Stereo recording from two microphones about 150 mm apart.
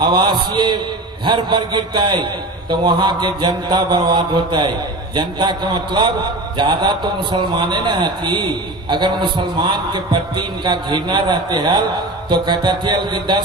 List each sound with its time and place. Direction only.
0.0 s a man's voice: 35° right (ahead or behind)